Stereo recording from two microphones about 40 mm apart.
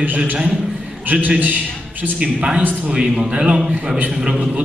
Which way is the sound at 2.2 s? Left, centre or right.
Right.